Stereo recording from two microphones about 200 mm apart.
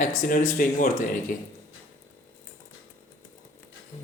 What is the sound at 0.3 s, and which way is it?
Speech, 40° left (ahead or behind).